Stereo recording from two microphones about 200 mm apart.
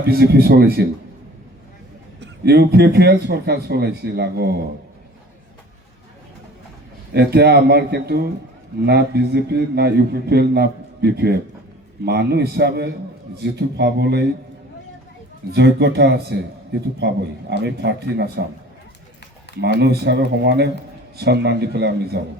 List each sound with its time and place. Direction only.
0.0 s a man's voice: 50° right (ahead or behind)
2.2 s a man's voice: 55° right (ahead or behind)
7.1 s a man's voice: 55° right (ahead or behind)
15.5 s a man's voice: 60° right (ahead or behind)
17.6 s a man's voice: 55° right (ahead or behind)
19.6 s a man's voice: 55° right (ahead or behind)